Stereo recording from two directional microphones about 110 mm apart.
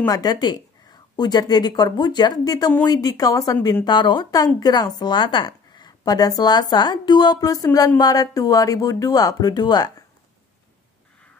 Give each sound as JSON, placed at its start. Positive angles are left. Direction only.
{"t": 0.0, "sound": "a woman's voice", "side_deg": 35}
{"t": 3.8, "sound": "a woman's voice", "side_deg": 45}